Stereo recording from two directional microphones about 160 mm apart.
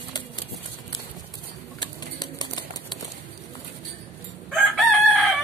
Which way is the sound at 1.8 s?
25° left (ahead or behind).